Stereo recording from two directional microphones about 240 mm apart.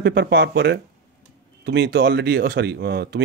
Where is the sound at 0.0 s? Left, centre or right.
Right.